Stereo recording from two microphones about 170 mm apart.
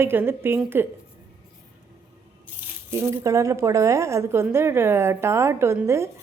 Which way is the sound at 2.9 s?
15° right (ahead or behind).